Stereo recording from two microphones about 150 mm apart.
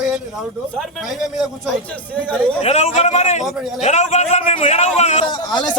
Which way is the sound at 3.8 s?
50° left (ahead or behind).